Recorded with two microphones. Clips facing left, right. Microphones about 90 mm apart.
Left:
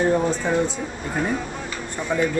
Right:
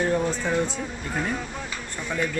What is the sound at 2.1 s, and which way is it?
Speech, 10° left (ahead or behind).